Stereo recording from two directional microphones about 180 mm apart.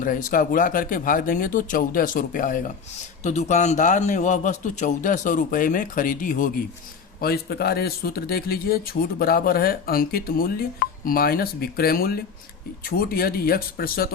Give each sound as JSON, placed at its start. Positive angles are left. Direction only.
{"t": 0.0, "sound": "a man's voice", "side_deg": 50}
{"t": 7.2, "sound": "a man's voice", "side_deg": 60}